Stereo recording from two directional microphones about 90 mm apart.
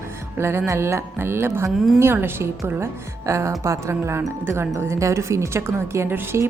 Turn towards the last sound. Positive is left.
turn(degrees=-30)  # may be behind; listen again after turning